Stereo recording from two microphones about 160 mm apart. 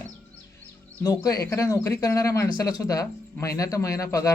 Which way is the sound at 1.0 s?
20° left (ahead or behind).